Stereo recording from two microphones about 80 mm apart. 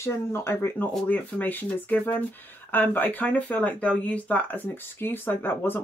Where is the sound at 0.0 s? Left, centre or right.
Left.